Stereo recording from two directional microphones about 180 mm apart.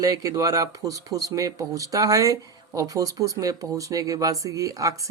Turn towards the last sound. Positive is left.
turn(degrees=-20)  # may be behind; listen again after turning